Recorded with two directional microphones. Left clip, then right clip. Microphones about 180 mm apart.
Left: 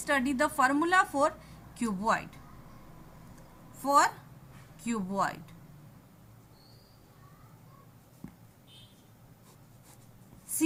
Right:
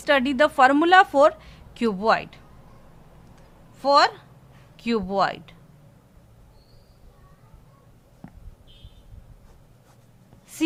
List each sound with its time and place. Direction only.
0.0 s a woman's voice: 50° right (ahead or behind)
3.8 s a woman's voice: 50° right (ahead or behind)